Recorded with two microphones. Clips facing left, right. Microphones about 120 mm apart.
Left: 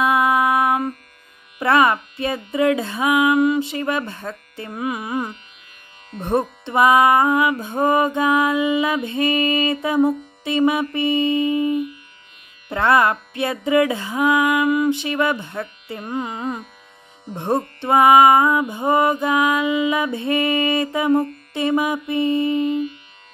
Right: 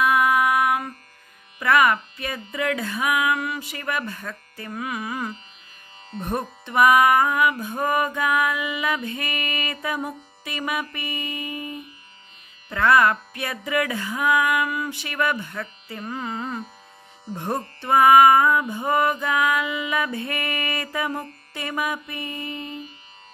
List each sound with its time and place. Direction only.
0.0 s music: 25° left (ahead or behind)
2.1 s speech: 25° left (ahead or behind)
2.5 s music: 25° left (ahead or behind)
16.1 s speech: 20° left (ahead or behind)
17.4 s music: 25° left (ahead or behind)
22.6 s music: 35° right (ahead or behind)